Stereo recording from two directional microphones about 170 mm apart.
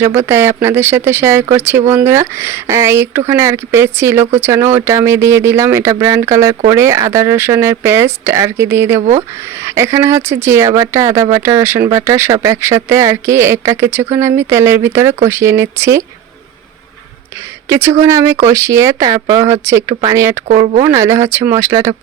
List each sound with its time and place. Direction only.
0.0 s speech: 15° right (ahead or behind)
9.0 s speech: 45° right (ahead or behind)
9.6 s speech: 15° right (ahead or behind)
17.7 s speech: 15° right (ahead or behind)